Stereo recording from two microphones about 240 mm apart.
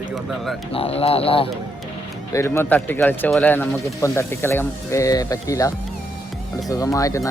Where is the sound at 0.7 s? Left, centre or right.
Left.